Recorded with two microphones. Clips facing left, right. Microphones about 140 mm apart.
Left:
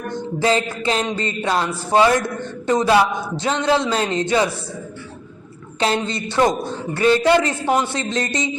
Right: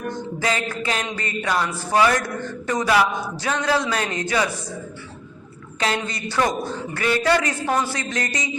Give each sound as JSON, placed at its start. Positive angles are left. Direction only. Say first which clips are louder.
{"t": 0.1, "sound": "music", "louder": "left 7 dB", "side_deg": 30}
{"t": 5.8, "sound": "music", "louder": "left 4 dB", "side_deg": 25}